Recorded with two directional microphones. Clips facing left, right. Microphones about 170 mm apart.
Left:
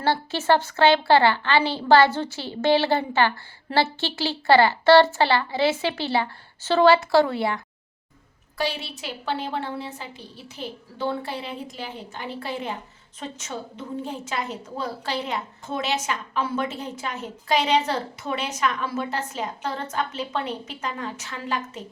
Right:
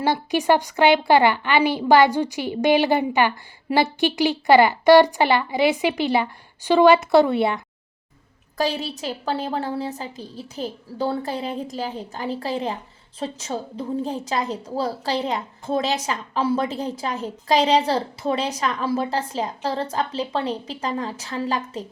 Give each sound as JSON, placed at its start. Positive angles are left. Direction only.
{"t": 0.0, "sound": "a woman's voice", "side_deg": -15}
{"t": 8.5, "sound": "a woman's voice", "side_deg": -40}